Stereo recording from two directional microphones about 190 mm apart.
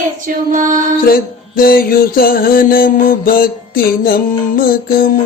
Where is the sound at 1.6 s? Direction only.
50° left (ahead or behind).